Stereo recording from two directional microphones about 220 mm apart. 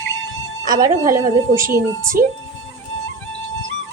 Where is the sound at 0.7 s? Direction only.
15° right (ahead or behind).